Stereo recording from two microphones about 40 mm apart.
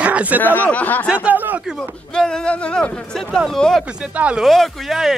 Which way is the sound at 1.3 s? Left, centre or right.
Right.